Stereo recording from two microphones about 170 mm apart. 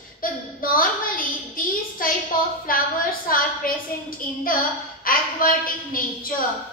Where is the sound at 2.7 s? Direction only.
55° left (ahead or behind).